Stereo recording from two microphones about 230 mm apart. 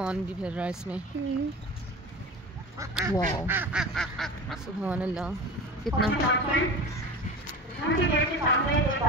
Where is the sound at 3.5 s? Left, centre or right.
Centre.